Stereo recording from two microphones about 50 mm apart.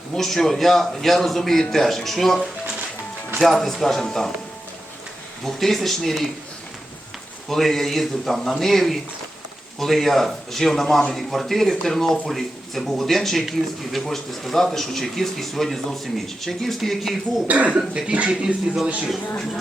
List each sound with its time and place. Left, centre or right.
0.2 s a man's voice: centre
3.4 s speech: centre
5.5 s speech: centre
7.5 s speech: centre
17.5 s speech: right